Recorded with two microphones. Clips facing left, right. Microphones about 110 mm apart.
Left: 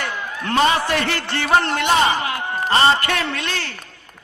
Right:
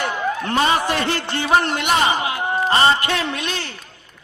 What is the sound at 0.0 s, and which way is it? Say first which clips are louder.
A man's voice: right 5 dB; 20° right (ahead or behind).